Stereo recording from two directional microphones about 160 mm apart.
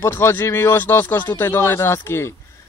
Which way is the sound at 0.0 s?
15° left (ahead or behind).